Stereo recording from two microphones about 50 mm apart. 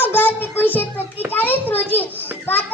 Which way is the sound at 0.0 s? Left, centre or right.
Left.